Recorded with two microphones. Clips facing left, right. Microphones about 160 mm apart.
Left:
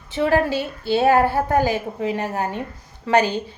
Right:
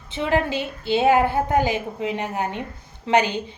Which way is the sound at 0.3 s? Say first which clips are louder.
Left 2 dB; 20° right (ahead or behind).